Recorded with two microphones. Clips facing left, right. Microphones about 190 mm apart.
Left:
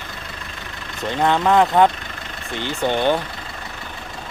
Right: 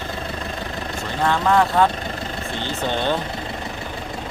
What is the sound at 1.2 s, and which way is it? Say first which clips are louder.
Speech: left 2 dB; 20° left (ahead or behind).